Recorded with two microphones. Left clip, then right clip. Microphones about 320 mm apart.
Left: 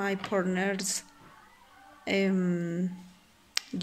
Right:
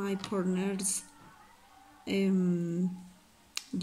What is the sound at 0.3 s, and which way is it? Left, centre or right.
Speech, left.